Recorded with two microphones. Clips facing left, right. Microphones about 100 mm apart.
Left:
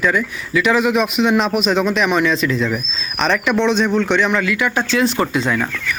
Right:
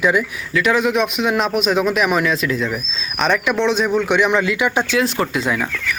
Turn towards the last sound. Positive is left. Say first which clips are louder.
# left 2 dB
turn(degrees=-5)  # may be behind; listen again after turning